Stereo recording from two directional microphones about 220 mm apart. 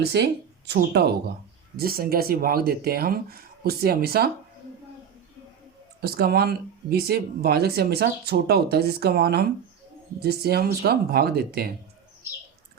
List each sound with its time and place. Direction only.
0.0 s speech: 50° right (ahead or behind)
6.0 s speech: 45° right (ahead or behind)